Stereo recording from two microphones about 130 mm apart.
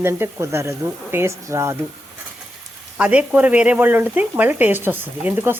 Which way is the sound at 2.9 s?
10° right (ahead or behind).